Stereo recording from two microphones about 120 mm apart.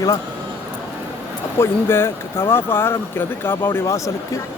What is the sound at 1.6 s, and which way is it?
Speech, 20° left (ahead or behind).